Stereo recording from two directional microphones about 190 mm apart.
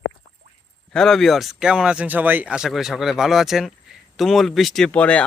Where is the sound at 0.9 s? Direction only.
Centre (ahead or behind).